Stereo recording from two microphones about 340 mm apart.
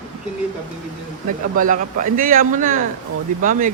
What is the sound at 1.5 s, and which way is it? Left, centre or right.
Speech, right.